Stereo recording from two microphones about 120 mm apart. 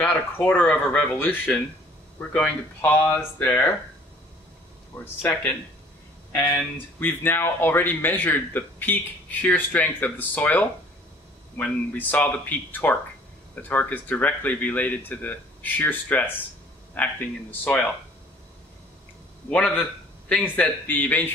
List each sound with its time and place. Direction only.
0.0 s speech: 10° left (ahead or behind)
5.0 s speech: 20° left (ahead or behind)
19.5 s speech: 10° left (ahead or behind)